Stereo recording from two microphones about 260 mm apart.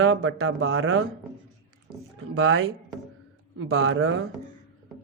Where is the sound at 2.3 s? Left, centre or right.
Right.